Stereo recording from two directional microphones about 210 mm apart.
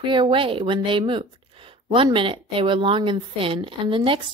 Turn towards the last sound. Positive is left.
turn(degrees=-25)  # may be behind; listen again after turning